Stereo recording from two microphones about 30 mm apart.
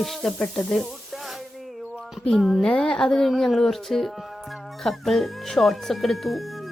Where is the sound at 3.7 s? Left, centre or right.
Centre.